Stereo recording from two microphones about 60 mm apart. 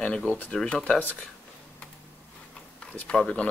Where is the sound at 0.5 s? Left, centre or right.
Centre.